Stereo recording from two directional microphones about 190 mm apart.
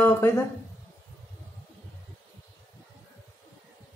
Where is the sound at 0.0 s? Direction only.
10° left (ahead or behind).